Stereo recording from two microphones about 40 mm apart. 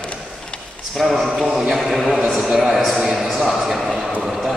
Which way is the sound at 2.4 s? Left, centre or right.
Centre.